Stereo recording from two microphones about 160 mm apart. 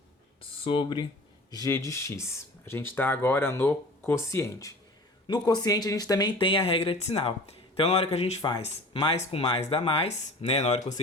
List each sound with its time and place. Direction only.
0.6 s speech: 35° left (ahead or behind)
1.5 s speech: 20° left (ahead or behind); by 8.4 s 40° left (ahead or behind)
8.4 s speech: 30° left (ahead or behind); by 10.9 s 45° left (ahead or behind)